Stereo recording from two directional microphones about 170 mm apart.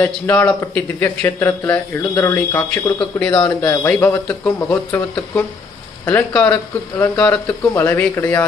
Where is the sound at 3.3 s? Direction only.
20° left (ahead or behind).